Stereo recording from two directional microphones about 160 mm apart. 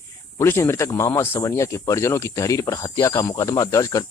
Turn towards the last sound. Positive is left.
turn(degrees=20)  # may be behind; listen again after turning